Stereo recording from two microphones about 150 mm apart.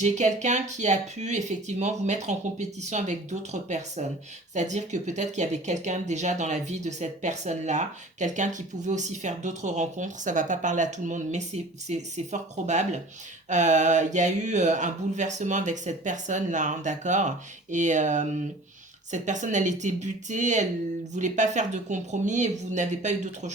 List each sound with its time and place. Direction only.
0.0 s speech: 50° right (ahead or behind)